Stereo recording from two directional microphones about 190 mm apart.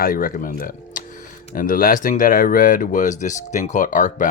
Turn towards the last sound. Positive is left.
turn(degrees=45)  # may be behind; listen again after turning